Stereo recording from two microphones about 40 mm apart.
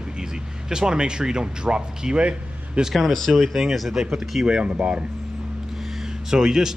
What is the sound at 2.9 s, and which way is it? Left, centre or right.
Speech, centre.